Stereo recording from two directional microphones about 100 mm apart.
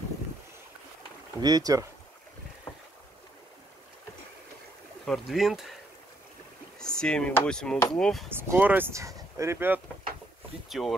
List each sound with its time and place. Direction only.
1.4 s speech: 40° right (ahead or behind)
5.0 s speech: centre (ahead or behind)
6.8 s speech: 5° left (ahead or behind)
8.3 s speech: 20° right (ahead or behind)
9.0 s speech: 30° right (ahead or behind)
10.7 s speech: centre (ahead or behind)